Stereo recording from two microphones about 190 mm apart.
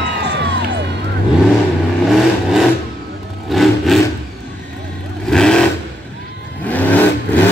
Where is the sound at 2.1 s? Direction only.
Centre (ahead or behind).